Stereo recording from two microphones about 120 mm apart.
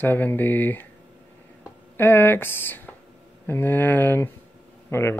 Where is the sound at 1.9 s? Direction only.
20° left (ahead or behind).